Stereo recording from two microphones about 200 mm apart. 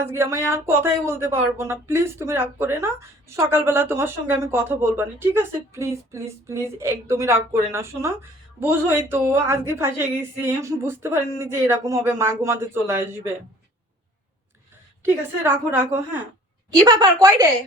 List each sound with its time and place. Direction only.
0.0 s speech: 15° right (ahead or behind)
15.0 s a woman's voice: 10° right (ahead or behind)